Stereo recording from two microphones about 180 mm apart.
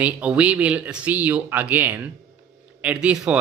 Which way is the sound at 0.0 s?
10° right (ahead or behind).